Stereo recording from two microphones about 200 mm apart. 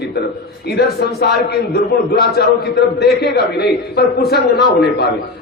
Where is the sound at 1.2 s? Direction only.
55° left (ahead or behind).